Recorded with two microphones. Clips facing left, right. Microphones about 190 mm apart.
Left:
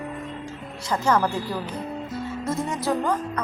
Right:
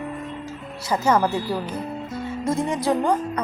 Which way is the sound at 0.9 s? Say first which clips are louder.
Right 2 dB; 10° right (ahead or behind).